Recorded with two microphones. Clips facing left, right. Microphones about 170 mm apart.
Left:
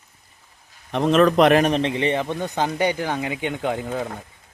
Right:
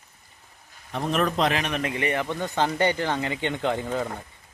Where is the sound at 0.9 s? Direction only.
90° left; by 1.6 s 65° left (ahead or behind).